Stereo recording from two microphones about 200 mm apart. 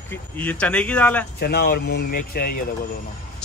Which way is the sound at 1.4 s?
55° left (ahead or behind).